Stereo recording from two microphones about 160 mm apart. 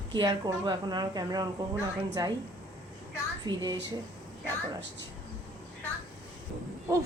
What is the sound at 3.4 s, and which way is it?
Speech, 25° right (ahead or behind).